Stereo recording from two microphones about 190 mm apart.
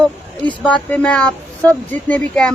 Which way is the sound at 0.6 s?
5° left (ahead or behind).